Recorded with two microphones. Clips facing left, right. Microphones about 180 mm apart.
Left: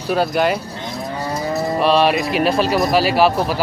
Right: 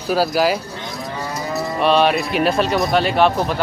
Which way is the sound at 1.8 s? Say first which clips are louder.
Even; centre (ahead or behind).